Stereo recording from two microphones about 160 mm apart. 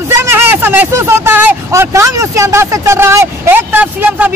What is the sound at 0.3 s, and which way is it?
Speech, 15° right (ahead or behind).